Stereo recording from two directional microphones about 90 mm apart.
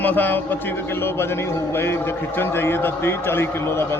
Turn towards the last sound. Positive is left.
turn(degrees=30)  # may be behind; listen again after turning